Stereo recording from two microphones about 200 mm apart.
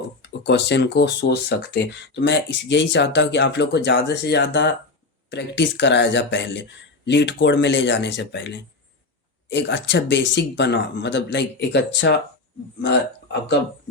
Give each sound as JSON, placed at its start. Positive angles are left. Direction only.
{"t": 0.2, "sound": "speech", "side_deg": 55}